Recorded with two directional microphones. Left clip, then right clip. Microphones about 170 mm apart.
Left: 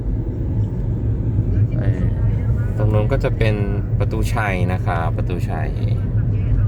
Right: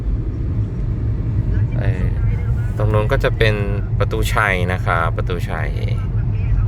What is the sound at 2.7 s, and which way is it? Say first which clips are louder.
Speech: right 3 dB; 5° right (ahead or behind).